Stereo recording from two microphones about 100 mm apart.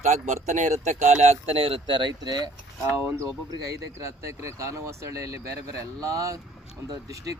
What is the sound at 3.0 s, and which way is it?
Speech, 30° right (ahead or behind).